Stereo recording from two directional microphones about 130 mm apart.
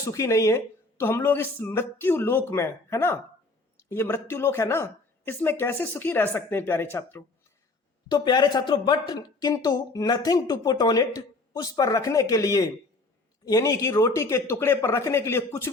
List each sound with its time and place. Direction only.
0.0 s speech: 25° left (ahead or behind)
8.0 s speech: 35° left (ahead or behind); by 15.7 s 20° left (ahead or behind)